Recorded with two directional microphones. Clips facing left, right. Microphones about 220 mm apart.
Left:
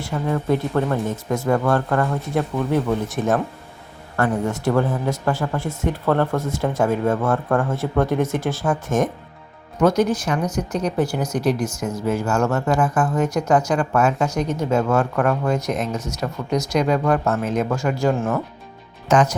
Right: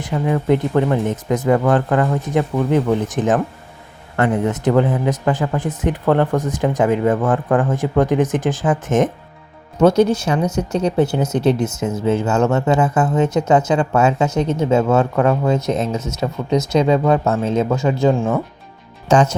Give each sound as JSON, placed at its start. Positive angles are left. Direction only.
{"t": 0.0, "sound": "speech", "side_deg": -15}
{"t": 19.0, "sound": "speech", "side_deg": -30}